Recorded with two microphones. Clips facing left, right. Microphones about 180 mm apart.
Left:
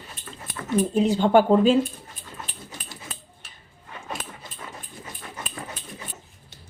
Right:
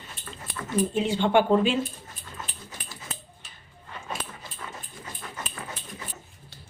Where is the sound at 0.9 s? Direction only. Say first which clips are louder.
Left 5 dB; 40° left (ahead or behind).